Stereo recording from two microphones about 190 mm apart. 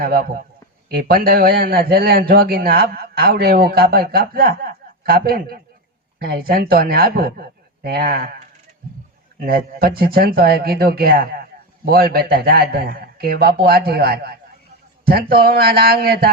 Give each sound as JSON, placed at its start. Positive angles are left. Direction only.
{"t": 0.0, "sound": "a man's voice", "side_deg": -50}
{"t": 9.4, "sound": "a man's voice", "side_deg": -50}